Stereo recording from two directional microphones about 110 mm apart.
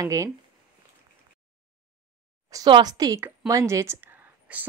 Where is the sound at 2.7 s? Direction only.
40° right (ahead or behind).